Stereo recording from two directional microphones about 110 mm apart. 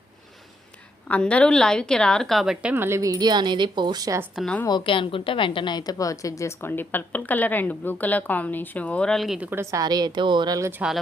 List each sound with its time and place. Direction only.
1.0 s a woman's voice: 10° left (ahead or behind); by 2.7 s 5° right (ahead or behind)
2.7 s speech: 20° right (ahead or behind)
3.0 s speech: 35° right (ahead or behind)
4.8 s a woman's voice: 50° left (ahead or behind); by 9.4 s centre (ahead or behind)
9.4 s a woman's voice: 20° right (ahead or behind)
9.6 s speech: 35° right (ahead or behind)
10.6 s speech: 20° right (ahead or behind)